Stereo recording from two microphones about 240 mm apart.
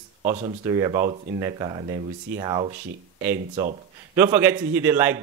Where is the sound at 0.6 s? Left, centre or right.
Centre.